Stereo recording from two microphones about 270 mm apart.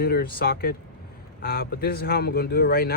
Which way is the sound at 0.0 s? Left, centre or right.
Left.